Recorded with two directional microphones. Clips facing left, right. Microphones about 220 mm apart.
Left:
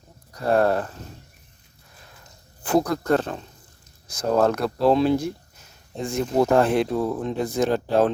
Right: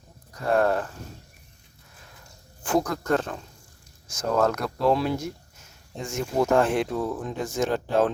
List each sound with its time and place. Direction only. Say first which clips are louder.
0.4 s speech: left 3 dB; 35° left (ahead or behind)
2.6 s speech: left 3 dB; 35° left (ahead or behind)